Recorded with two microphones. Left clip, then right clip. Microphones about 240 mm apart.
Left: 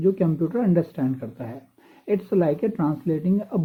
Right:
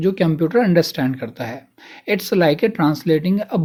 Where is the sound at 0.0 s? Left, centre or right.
Right.